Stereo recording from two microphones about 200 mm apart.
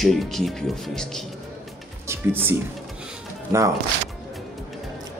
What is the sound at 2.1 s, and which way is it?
Speech, 10° right (ahead or behind).